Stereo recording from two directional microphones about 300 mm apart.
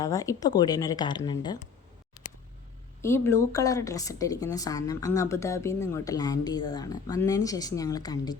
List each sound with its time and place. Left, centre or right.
0.0 s speech: centre
3.0 s speech: centre